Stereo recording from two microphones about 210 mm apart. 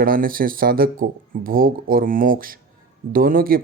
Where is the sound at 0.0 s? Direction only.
45° right (ahead or behind).